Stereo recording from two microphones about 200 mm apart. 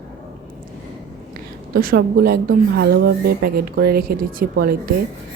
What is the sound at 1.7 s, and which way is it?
A woman's voice, 45° right (ahead or behind).